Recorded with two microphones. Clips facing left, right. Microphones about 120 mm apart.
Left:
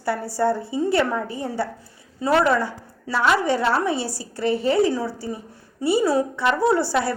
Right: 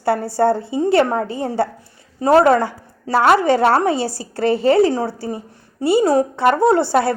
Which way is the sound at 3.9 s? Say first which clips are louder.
Right 5 dB; centre (ahead or behind).